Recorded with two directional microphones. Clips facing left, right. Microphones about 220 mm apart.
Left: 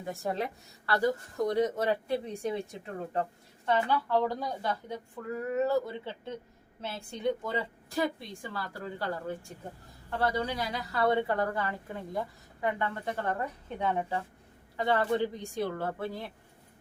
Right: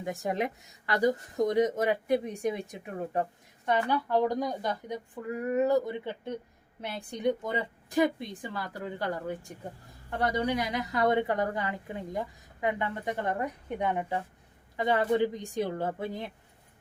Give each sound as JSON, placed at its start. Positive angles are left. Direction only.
{"t": 0.0, "sound": "a woman's voice", "side_deg": -15}